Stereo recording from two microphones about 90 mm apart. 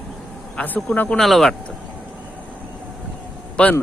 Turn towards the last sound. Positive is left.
turn(degrees=15)  # may be behind; listen again after turning